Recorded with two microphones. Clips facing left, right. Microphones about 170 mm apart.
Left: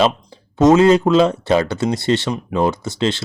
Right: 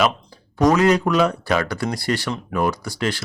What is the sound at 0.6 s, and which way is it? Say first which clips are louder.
Speech: left 5 dB; 25° left (ahead or behind).